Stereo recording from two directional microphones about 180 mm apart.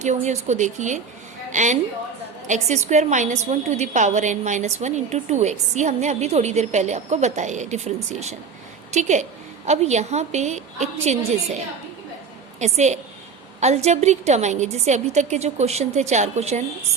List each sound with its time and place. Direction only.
0.0 s a woman's voice: 40° right (ahead or behind)